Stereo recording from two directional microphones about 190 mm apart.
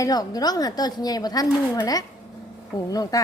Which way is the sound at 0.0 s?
20° left (ahead or behind).